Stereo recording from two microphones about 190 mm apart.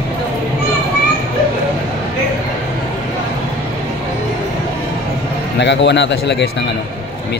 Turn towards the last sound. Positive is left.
turn(degrees=65)  # may be behind; listen again after turning